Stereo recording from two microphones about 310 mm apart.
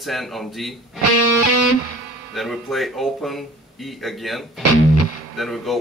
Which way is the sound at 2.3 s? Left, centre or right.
Centre.